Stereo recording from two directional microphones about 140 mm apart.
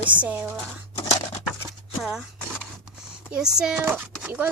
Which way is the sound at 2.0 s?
Centre (ahead or behind).